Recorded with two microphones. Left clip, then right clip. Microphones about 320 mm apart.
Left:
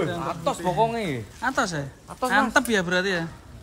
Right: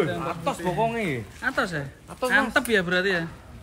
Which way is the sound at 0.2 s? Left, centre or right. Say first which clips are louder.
Left 1 dB; left.